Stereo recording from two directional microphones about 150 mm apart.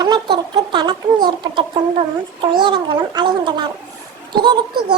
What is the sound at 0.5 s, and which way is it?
Speech, 30° right (ahead or behind).